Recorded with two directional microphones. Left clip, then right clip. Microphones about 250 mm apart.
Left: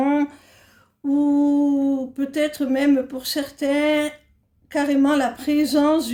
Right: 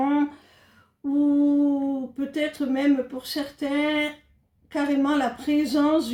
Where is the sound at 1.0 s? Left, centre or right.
Left.